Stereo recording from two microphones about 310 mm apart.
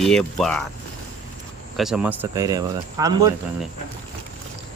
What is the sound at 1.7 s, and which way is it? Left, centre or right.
Speech, centre.